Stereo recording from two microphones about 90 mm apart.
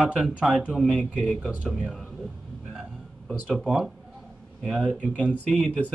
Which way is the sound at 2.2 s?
10° right (ahead or behind).